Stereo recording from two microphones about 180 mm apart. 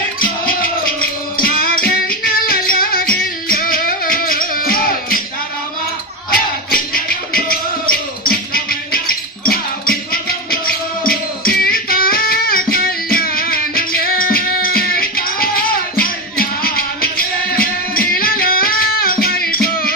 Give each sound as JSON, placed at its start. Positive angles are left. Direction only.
{"t": 0.2, "sound": "music", "side_deg": 55}
{"t": 6.3, "sound": "music", "side_deg": 55}